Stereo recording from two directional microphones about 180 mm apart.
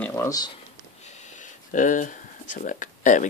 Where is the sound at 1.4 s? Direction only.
45° left (ahead or behind).